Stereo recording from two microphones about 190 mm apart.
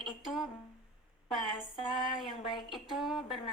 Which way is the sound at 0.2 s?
Centre (ahead or behind).